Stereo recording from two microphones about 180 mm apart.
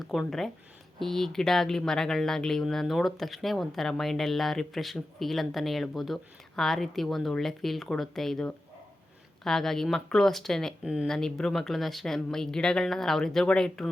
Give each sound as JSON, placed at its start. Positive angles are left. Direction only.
{"t": 0.0, "sound": "speech", "side_deg": 0}